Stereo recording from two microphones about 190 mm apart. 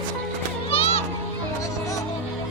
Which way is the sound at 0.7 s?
30° left (ahead or behind).